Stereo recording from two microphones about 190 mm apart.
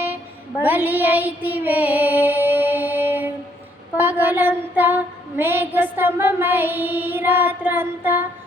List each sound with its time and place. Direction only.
0.6 s child singing: 10° right (ahead or behind)
3.9 s female singing: 10° right (ahead or behind)